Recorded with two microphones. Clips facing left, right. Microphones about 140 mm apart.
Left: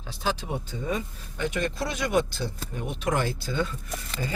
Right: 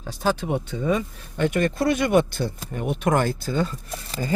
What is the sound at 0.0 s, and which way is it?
Speech, 45° right (ahead or behind).